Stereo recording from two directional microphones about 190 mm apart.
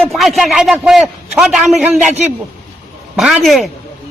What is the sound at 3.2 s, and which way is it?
Speech, centre (ahead or behind).